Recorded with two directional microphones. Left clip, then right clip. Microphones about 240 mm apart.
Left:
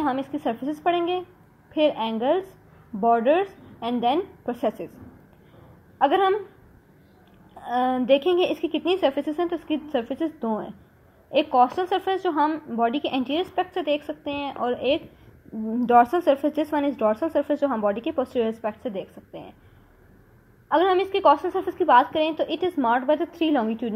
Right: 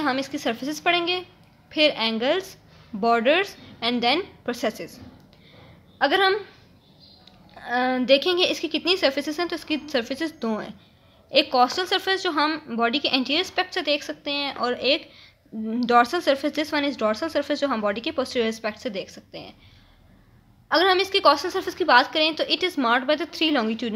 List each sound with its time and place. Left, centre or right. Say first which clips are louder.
0.0 s speech: right 1 dB; right
7.6 s speech: even; right
11.7 s speech: right 1 dB; right
20.6 s speech: right 1 dB; right